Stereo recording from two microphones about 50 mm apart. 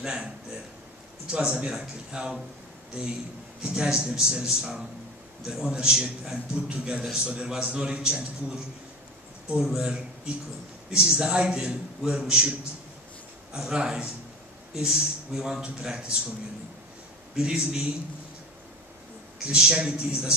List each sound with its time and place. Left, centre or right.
0.0 s a man's voice: centre
3.6 s a man's voice: centre
9.6 s a man's voice: centre
17.4 s a man's voice: centre
19.4 s a man's voice: centre